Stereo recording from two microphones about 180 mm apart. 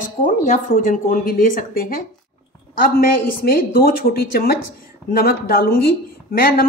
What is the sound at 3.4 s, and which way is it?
A woman's voice, 55° left (ahead or behind).